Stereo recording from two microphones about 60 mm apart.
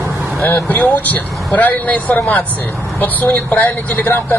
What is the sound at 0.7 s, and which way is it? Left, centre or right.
Speech, left.